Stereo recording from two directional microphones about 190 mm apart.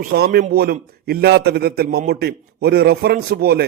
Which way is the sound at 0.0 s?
50° right (ahead or behind).